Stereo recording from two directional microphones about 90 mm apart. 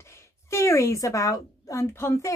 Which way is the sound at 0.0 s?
30° left (ahead or behind).